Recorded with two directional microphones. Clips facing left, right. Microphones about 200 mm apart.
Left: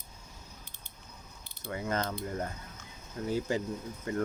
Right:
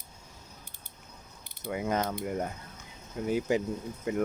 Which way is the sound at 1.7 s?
15° right (ahead or behind).